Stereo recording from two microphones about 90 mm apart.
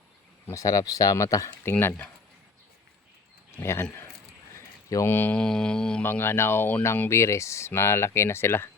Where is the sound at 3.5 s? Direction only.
25° left (ahead or behind).